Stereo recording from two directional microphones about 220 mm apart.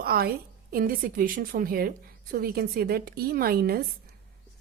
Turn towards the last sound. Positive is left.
turn(degrees=-45)  # may be behind; listen again after turning